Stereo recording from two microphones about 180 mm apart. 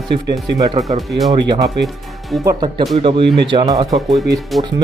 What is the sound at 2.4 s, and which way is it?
Speech, 20° right (ahead or behind).